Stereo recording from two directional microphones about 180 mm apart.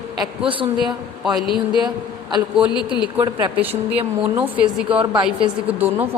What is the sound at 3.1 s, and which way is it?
Speech, 25° right (ahead or behind).